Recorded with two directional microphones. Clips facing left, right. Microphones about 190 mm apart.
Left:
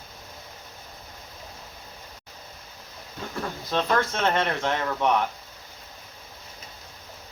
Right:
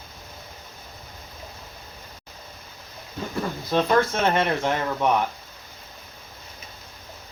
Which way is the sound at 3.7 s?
10° right (ahead or behind).